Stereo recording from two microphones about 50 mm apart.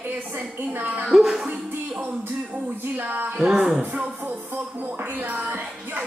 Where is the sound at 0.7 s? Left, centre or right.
Right.